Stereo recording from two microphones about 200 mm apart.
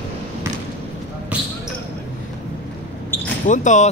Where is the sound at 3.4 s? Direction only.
40° left (ahead or behind).